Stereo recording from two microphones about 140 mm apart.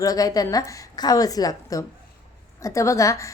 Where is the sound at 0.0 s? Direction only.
25° left (ahead or behind).